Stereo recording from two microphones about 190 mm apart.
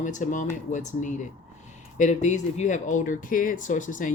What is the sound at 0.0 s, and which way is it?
Speech, 40° left (ahead or behind).